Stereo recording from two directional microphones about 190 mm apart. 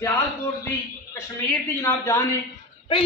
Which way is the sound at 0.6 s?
15° left (ahead or behind).